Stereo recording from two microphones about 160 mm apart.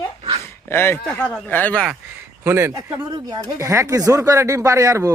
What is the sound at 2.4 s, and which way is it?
Speech, 15° right (ahead or behind).